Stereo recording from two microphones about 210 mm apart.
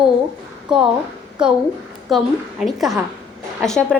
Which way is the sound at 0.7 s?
5° right (ahead or behind).